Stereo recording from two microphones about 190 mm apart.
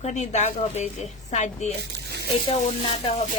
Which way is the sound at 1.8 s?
60° right (ahead or behind).